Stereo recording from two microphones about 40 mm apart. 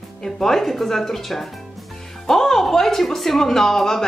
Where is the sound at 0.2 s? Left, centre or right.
Centre.